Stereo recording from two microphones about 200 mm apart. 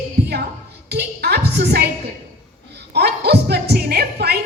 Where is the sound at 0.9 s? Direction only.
55° right (ahead or behind).